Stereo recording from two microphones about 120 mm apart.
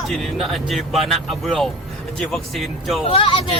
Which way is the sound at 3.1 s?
45° left (ahead or behind).